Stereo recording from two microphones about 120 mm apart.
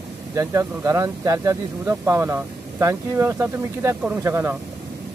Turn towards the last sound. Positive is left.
turn(degrees=-20)  # may be behind; listen again after turning